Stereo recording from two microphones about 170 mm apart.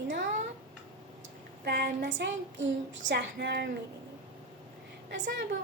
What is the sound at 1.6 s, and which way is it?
Speech, 75° right (ahead or behind).